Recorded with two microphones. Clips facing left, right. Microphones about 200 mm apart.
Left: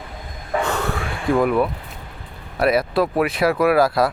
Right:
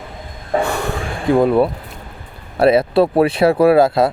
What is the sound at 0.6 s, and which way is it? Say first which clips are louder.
Snort: right 3 dB; 10° right (ahead or behind).